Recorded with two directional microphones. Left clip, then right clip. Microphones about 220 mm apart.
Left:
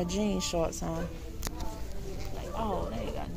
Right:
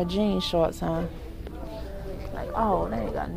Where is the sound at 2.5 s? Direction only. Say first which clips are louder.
Right 9 dB; 30° right (ahead or behind).